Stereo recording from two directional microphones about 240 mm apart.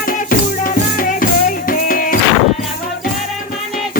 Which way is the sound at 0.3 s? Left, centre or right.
Left.